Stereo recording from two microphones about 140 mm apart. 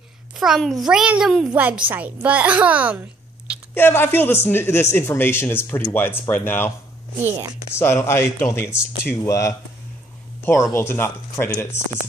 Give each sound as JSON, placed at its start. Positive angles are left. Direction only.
{"t": 0.4, "sound": "a child's voice", "side_deg": 0}
{"t": 3.7, "sound": "speech", "side_deg": 15}
{"t": 7.2, "sound": "a woman's voice", "side_deg": -15}
{"t": 7.7, "sound": "speech", "side_deg": 20}